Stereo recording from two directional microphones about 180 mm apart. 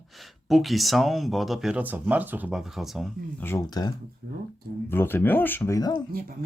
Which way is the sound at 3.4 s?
20° left (ahead or behind).